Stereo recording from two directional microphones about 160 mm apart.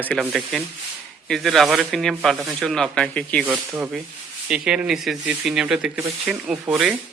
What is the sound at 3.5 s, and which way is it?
Speech, 10° right (ahead or behind).